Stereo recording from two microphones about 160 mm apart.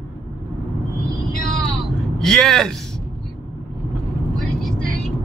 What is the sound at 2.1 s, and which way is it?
Speech, 5° left (ahead or behind).